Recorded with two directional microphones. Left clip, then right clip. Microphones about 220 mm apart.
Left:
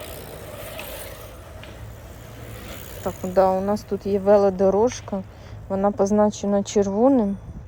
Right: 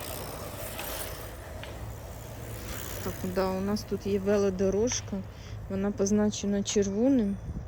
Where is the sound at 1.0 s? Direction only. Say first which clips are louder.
Left 2 dB; 35° right (ahead or behind).